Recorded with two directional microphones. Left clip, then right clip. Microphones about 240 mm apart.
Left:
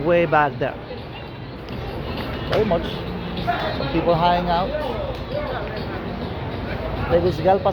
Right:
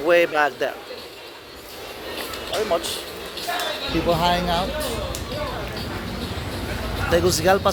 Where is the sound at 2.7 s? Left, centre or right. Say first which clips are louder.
Even; centre.